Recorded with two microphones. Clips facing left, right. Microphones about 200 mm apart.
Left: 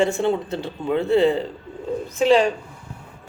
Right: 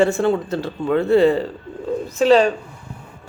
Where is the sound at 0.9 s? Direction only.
60° right (ahead or behind).